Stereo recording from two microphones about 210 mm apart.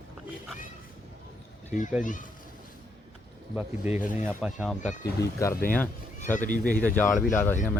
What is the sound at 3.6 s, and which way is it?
Speech, 5° right (ahead or behind).